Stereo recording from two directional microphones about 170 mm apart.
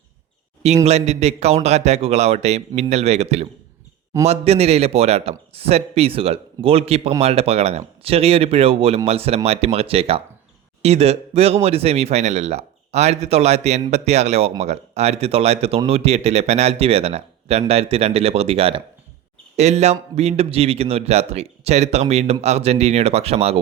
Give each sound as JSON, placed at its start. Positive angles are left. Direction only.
{"t": 0.9, "sound": "speech", "side_deg": -40}